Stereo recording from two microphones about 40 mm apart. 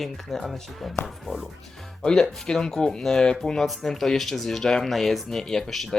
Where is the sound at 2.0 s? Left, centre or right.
Centre.